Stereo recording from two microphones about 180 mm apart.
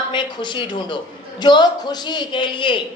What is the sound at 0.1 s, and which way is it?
A man's voice, 25° left (ahead or behind).